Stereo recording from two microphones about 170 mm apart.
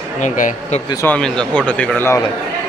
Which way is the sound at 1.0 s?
5° left (ahead or behind).